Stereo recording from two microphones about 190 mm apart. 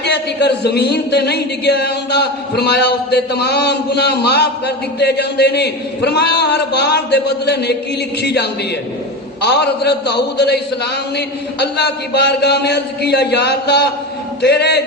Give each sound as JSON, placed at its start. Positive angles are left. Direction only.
{"t": 0.0, "sound": "speech", "side_deg": 60}
{"t": 11.6, "sound": "speech", "side_deg": 60}